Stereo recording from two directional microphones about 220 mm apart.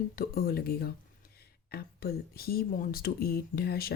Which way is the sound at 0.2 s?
45° left (ahead or behind).